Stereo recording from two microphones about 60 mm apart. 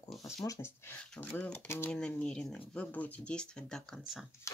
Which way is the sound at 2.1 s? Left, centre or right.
Centre.